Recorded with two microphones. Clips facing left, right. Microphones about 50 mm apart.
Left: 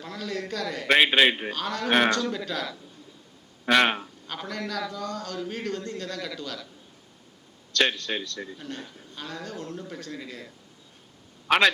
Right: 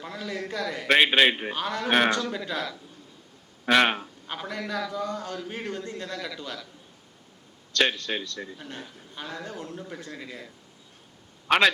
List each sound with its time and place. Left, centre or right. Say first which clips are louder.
0.0 s a man's voice: left 1 dB; centre
1.5 s a man's voice: even; centre
3.7 s a sound: even; centre
4.4 s a man's voice: even; centre
7.7 s a man's voice: even; centre